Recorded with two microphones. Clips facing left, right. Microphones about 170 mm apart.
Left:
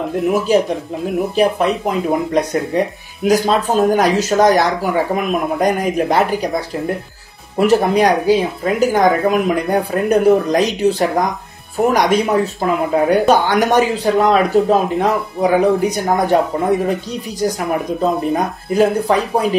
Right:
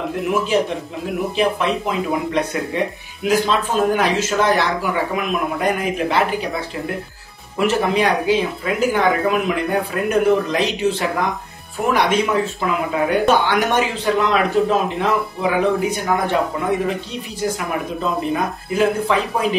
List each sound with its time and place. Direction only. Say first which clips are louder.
0.3 s speech: left 4 dB; 40° left (ahead or behind)
18.3 s speech: left 4 dB; 40° left (ahead or behind)